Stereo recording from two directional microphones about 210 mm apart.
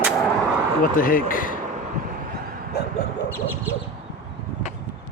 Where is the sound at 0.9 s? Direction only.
40° left (ahead or behind).